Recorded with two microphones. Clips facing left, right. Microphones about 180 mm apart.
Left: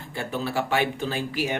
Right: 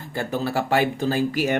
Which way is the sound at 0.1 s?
40° right (ahead or behind).